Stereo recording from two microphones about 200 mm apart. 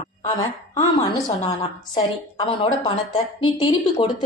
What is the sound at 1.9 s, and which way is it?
A woman's voice, 20° left (ahead or behind).